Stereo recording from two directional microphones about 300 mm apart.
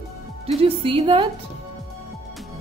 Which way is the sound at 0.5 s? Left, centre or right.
Centre.